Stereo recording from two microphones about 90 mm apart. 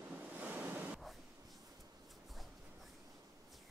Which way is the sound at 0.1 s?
15° right (ahead or behind).